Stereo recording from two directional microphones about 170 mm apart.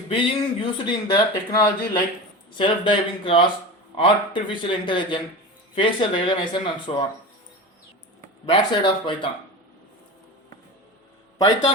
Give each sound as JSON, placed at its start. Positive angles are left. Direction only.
{"t": 0.1, "sound": "speech", "side_deg": 30}
{"t": 8.4, "sound": "speech", "side_deg": 30}
{"t": 11.3, "sound": "speech", "side_deg": 25}